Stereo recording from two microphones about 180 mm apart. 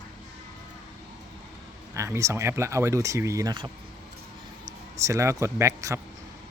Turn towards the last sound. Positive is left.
turn(degrees=-15)  # may be behind; listen again after turning